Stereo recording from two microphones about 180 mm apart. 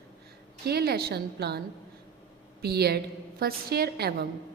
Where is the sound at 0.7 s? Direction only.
60° right (ahead or behind).